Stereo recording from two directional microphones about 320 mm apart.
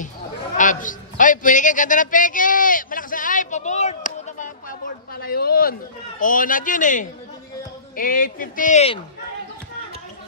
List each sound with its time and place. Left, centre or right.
0.6 s a man's voice: left